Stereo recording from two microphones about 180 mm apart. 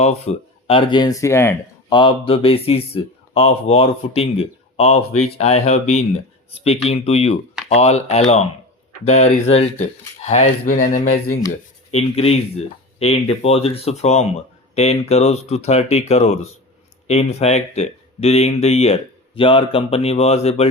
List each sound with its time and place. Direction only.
0.0 s speech: 35° left (ahead or behind); by 2.0 s 15° left (ahead or behind)
2.0 s speech: 30° left (ahead or behind)